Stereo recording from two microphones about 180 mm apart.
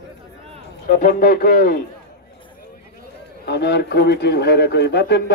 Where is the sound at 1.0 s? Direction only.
50° left (ahead or behind).